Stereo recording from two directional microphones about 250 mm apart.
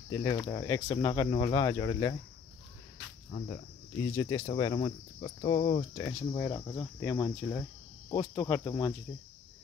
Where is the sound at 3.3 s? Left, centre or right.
Centre.